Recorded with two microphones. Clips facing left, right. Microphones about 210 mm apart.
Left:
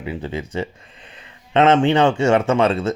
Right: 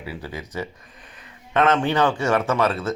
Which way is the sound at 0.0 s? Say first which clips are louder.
Left 6 dB; 20° left (ahead or behind).